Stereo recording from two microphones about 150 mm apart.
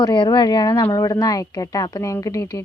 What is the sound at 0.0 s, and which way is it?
Speech, 30° left (ahead or behind).